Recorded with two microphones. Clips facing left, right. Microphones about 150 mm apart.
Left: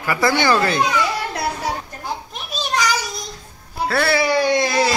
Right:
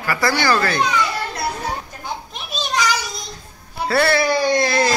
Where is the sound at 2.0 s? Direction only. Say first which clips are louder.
Left 1 dB; 5° left (ahead or behind).